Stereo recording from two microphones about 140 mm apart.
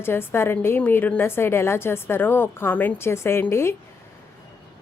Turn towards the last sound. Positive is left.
turn(degrees=20)  # may be behind; listen again after turning